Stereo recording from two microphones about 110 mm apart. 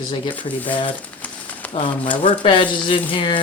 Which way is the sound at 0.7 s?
50° left (ahead or behind).